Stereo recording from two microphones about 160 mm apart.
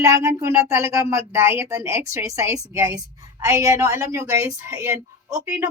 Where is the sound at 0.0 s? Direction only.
20° right (ahead or behind).